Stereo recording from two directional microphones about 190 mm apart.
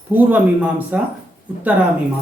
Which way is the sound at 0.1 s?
10° right (ahead or behind).